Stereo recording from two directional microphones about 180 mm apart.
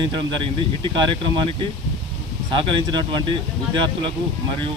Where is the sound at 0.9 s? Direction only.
25° right (ahead or behind).